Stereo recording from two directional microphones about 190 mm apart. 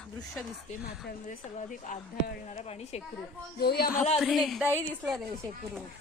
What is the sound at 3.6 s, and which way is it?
Speech, 55° left (ahead or behind).